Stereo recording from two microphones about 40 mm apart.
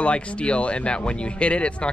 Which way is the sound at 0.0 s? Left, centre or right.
Left.